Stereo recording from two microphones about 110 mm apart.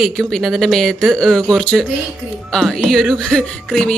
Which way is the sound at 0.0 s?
5° left (ahead or behind).